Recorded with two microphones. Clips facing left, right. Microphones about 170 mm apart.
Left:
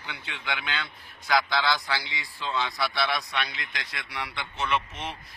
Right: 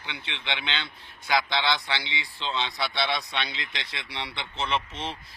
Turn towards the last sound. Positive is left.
turn(degrees=-30)  # may be behind; listen again after turning